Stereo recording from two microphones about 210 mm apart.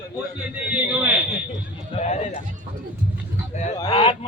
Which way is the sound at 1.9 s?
30° left (ahead or behind).